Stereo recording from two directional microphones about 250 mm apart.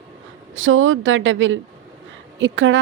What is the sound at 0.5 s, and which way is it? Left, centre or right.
Speech, right.